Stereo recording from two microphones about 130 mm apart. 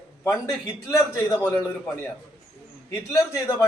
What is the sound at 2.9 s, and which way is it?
Speech, 20° left (ahead or behind).